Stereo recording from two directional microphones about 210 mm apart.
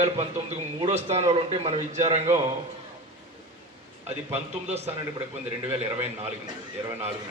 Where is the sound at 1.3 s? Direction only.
30° right (ahead or behind).